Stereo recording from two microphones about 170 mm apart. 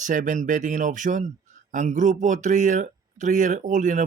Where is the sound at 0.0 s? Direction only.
50° right (ahead or behind).